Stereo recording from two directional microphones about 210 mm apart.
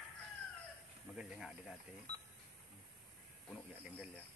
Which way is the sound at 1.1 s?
5° right (ahead or behind).